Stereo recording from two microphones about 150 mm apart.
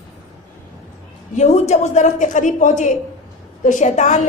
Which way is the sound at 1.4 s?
50° left (ahead or behind).